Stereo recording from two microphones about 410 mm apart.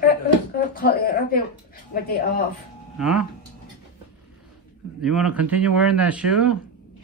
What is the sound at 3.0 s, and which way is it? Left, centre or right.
Speech, centre.